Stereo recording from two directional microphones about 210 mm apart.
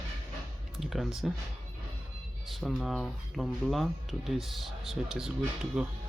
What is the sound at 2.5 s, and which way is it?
Speech, centre (ahead or behind).